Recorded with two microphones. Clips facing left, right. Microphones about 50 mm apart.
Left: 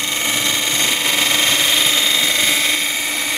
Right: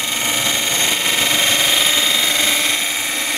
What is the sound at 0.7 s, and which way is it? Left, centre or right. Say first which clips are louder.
Engine: even; centre.